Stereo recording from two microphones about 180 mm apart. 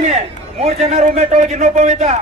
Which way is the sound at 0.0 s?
40° right (ahead or behind).